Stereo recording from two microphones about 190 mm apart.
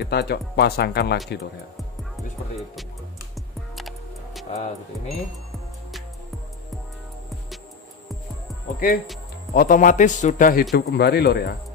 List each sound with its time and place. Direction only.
0.0 s speech: 60° left (ahead or behind)
3.7 s music: centre (ahead or behind)
8.7 s a man's voice: 50° left (ahead or behind)
10.7 s speech: 60° left (ahead or behind)